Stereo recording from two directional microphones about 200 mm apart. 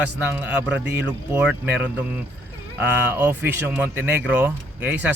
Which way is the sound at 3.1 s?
10° right (ahead or behind).